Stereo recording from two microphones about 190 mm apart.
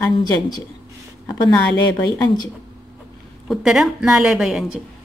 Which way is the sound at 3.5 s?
5° right (ahead or behind).